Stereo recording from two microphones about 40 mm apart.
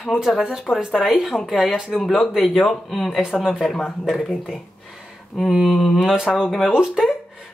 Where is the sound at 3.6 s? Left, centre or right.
Centre.